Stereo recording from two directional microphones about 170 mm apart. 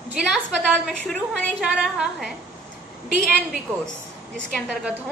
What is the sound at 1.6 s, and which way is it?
Speech, 5° right (ahead or behind).